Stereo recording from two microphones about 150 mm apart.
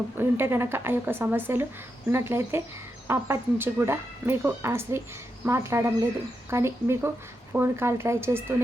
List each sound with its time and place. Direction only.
0.2 s speech: 15° right (ahead or behind)